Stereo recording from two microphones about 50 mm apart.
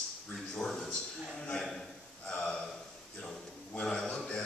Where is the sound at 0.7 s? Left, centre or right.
Centre.